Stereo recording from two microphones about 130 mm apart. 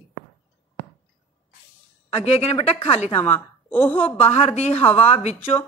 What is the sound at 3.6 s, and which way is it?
Speech, 15° left (ahead or behind).